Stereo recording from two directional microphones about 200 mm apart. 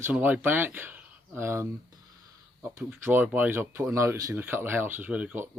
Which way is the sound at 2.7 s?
10° right (ahead or behind).